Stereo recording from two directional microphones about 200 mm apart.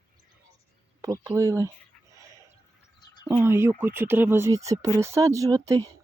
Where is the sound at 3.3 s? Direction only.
15° right (ahead or behind).